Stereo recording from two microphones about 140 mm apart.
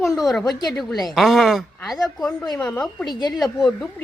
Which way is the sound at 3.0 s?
30° left (ahead or behind).